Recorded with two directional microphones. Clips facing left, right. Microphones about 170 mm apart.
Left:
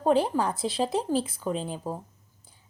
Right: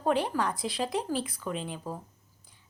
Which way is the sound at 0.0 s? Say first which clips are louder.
Left 4 dB; 30° left (ahead or behind).